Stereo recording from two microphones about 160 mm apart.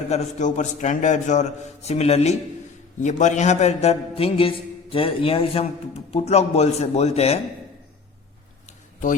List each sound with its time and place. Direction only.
0.1 s a man's voice: 45° left (ahead or behind)